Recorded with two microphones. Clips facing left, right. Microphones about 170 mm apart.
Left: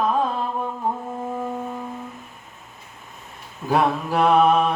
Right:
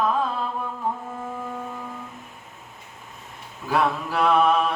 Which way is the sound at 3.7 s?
20° left (ahead or behind).